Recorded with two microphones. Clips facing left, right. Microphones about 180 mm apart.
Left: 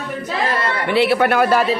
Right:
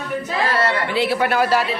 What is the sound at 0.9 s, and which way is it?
Speech, 65° left (ahead or behind).